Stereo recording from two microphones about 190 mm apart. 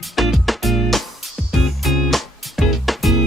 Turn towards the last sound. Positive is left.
turn(degrees=0)  # may be behind; listen again after turning